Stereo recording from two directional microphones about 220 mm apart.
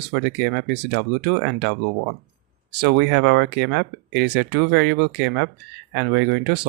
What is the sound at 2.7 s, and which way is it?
Speech, 50° right (ahead or behind).